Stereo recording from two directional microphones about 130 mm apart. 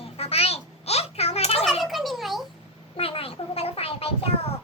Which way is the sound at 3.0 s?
45° left (ahead or behind).